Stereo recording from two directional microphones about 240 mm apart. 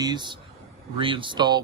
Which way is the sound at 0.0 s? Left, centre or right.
Centre.